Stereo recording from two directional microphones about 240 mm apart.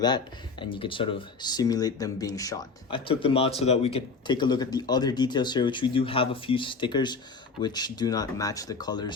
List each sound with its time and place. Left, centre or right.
0.6 s speech: left